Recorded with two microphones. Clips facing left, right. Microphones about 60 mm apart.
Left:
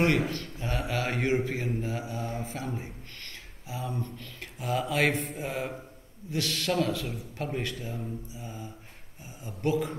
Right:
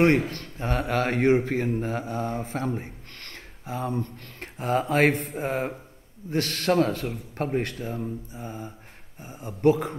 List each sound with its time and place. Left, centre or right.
0.3 s mantra: right